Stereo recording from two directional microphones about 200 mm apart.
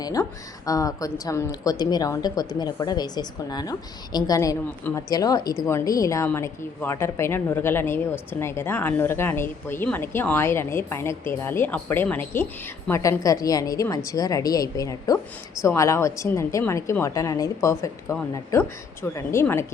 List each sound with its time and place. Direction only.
0.0 s a woman's voice: 15° left (ahead or behind)